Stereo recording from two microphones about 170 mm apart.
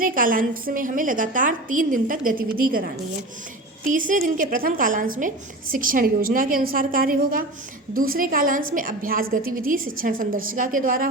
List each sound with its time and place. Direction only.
0.0 s a woman's voice: 55° right (ahead or behind)
3.9 s a woman's voice: 50° right (ahead or behind)